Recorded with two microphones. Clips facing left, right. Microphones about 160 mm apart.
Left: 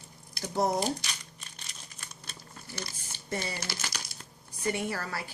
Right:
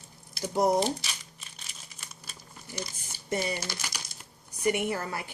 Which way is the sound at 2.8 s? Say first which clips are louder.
Right 3 dB; 15° right (ahead or behind).